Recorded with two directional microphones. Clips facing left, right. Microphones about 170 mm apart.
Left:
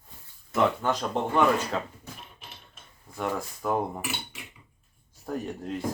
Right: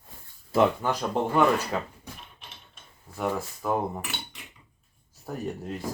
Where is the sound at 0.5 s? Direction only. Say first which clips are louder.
Right 3 dB; 30° right (ahead or behind).